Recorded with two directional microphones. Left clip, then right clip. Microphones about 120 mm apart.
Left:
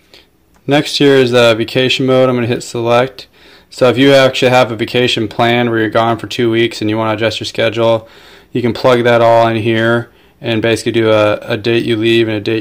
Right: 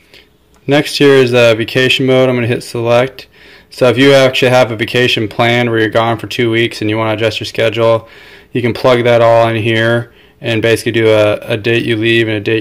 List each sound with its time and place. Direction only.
0.7 s speech: 25° left (ahead or behind)